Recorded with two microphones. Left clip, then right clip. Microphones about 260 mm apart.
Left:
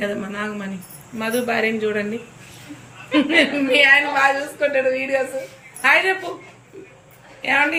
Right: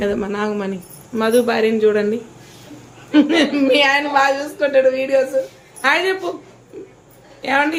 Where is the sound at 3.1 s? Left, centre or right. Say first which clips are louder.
Right 2 dB; centre.